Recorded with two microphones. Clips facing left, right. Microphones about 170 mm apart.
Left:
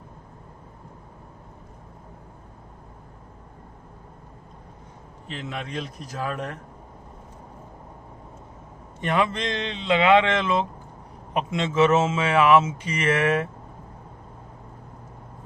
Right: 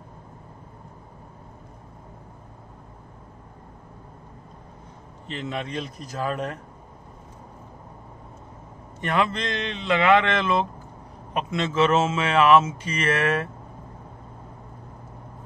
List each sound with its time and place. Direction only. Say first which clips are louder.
5.3 s speech: right 2 dB; centre (ahead or behind)
9.0 s speech: left 1 dB; 15° left (ahead or behind)